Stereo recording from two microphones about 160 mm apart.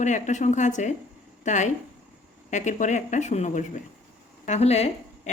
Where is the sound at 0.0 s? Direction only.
50° left (ahead or behind).